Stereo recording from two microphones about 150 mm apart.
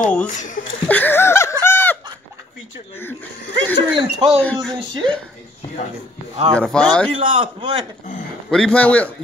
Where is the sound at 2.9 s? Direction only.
15° left (ahead or behind).